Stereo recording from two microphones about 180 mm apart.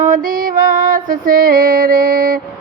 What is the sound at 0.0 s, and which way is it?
Music, 50° right (ahead or behind).